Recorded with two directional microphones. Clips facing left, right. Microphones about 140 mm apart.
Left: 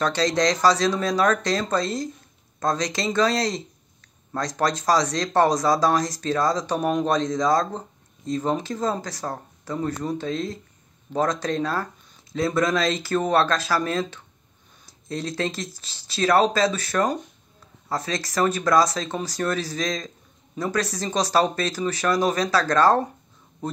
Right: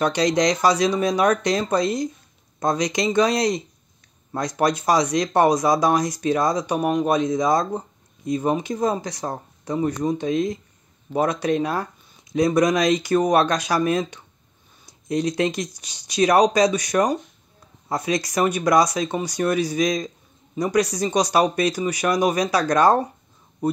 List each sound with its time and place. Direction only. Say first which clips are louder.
0.0 s speech: right 2 dB; 15° right (ahead or behind)